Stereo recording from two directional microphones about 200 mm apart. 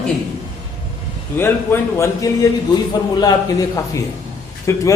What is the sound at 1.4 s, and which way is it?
A man's voice, 10° left (ahead or behind).